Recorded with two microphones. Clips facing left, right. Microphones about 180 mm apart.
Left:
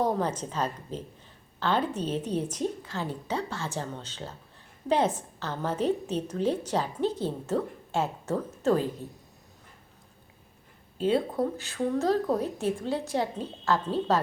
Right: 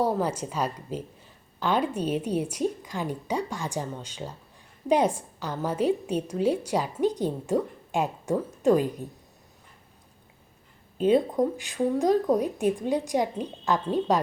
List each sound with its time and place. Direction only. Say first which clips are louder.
0.0 s a woman's voice: right 2 dB; 10° right (ahead or behind)
10.9 s a woman's voice: right 4 dB; 20° right (ahead or behind)